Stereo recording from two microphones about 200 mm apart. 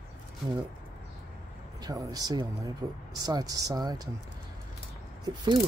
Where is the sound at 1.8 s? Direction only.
20° right (ahead or behind).